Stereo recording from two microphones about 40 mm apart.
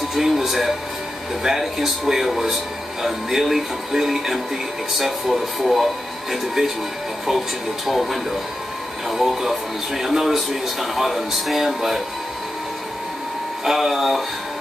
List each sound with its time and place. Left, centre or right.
0.1 s music: centre
1.4 s speech: centre
13.7 s speech: centre